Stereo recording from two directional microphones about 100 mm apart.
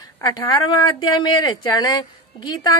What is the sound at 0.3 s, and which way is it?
A woman's voice, 50° left (ahead or behind).